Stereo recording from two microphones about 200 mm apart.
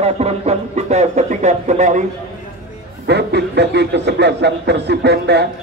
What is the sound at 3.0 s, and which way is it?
Speech, 55° right (ahead or behind).